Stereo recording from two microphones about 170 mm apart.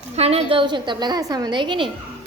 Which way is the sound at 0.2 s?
35° right (ahead or behind).